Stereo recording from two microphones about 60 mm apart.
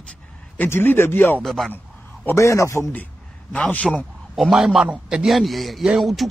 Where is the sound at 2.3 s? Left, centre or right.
Left.